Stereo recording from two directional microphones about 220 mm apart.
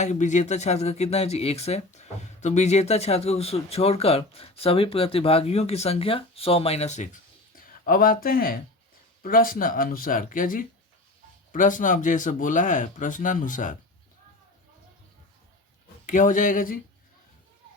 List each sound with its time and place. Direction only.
0.0 s speech: 35° left (ahead or behind)
16.0 s speech: 35° left (ahead or behind)